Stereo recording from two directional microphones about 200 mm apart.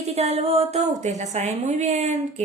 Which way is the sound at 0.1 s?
30° right (ahead or behind).